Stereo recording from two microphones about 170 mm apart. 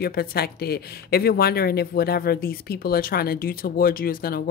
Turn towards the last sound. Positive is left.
turn(degrees=60)  # may be behind; listen again after turning